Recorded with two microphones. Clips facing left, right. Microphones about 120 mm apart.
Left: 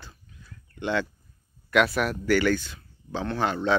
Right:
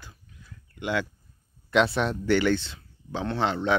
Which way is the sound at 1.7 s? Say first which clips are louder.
Even; 25° right (ahead or behind).